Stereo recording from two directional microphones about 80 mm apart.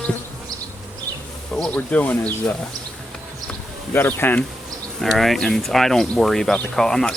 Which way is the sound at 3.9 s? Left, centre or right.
Left.